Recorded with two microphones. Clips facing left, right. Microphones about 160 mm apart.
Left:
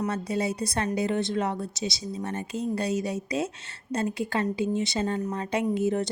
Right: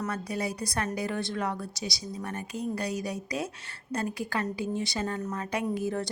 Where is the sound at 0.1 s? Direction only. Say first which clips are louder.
Left 4 dB; 25° left (ahead or behind).